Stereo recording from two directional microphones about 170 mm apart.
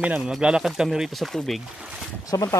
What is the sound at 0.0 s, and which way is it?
Speech, 5° right (ahead or behind).